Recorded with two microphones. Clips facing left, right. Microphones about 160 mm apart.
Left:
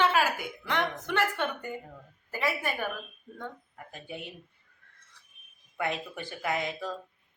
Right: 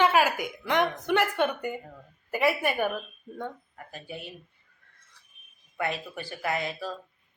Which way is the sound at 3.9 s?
20° left (ahead or behind).